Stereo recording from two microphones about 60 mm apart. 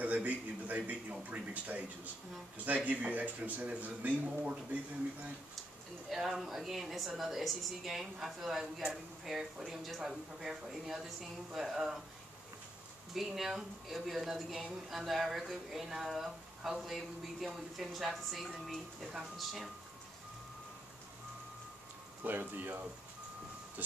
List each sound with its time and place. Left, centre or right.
0.0 s a sound: right
1.1 s speech: right
6.0 s speech: centre
13.1 s speech: centre
22.2 s speech: right